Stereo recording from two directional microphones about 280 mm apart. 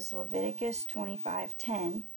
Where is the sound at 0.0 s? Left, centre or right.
Right.